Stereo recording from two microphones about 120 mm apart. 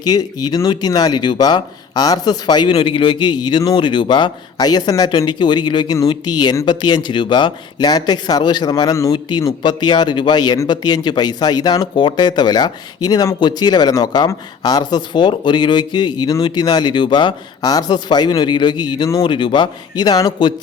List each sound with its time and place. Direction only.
0.0 s speech: 35° left (ahead or behind)